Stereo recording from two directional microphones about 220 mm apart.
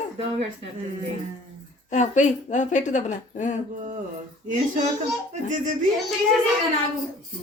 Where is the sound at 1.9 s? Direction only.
35° left (ahead or behind).